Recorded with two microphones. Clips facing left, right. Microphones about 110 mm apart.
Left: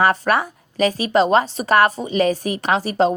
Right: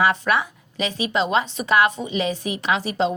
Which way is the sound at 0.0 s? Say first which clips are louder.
Left 3 dB; 45° left (ahead or behind).